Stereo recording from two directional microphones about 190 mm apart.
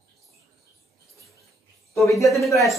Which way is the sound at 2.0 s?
15° left (ahead or behind).